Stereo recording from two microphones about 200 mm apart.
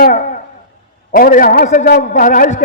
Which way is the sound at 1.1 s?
45° left (ahead or behind).